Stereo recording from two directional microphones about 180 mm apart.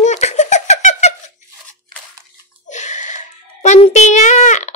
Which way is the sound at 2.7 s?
40° left (ahead or behind).